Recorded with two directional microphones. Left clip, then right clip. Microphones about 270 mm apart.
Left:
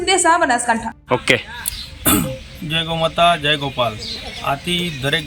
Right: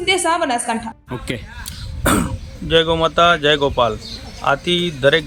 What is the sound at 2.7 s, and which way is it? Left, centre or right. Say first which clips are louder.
Speech: right 5 dB; right.